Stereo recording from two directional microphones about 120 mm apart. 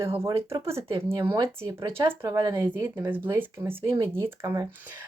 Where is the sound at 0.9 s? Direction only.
45° right (ahead or behind).